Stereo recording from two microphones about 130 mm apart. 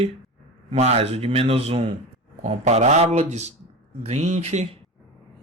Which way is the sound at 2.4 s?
60° right (ahead or behind).